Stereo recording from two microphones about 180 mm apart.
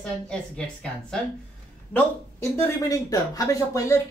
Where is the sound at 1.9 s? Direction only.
15° left (ahead or behind).